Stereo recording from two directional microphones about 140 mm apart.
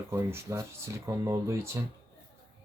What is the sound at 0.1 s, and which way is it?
Speech, 20° right (ahead or behind).